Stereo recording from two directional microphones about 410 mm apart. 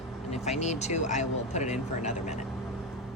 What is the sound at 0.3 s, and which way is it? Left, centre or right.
A woman's voice, centre.